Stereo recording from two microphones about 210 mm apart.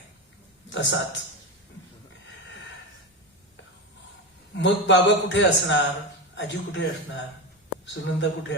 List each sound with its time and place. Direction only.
0.7 s a man's voice: 55° left (ahead or behind)
4.5 s a man's voice: 55° left (ahead or behind)